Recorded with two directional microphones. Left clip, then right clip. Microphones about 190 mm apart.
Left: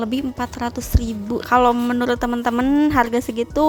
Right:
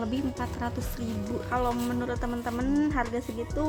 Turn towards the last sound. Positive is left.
turn(degrees=45)  # may be behind; listen again after turning